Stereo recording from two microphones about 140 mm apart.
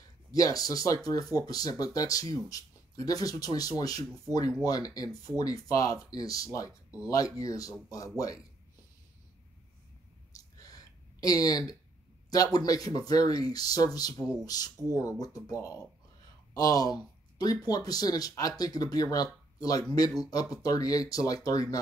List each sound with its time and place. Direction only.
0.3 s speech: 25° left (ahead or behind)
10.3 s a sound: 25° left (ahead or behind)
12.5 s speech: 25° left (ahead or behind)